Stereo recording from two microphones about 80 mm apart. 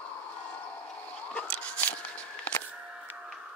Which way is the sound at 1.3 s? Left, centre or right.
Centre.